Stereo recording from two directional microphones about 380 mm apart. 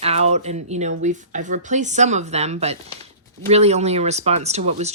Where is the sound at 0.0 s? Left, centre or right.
Centre.